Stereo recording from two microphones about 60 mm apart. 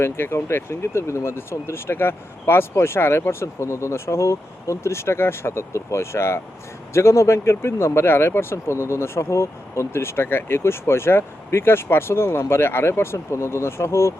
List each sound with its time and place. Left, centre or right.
0.0 s speech: left